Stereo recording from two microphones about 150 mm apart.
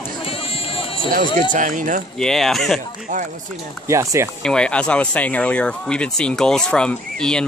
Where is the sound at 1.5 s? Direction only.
60° right (ahead or behind).